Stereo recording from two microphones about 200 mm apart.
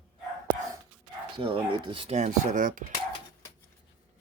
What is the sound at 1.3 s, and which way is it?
Speech, 25° right (ahead or behind).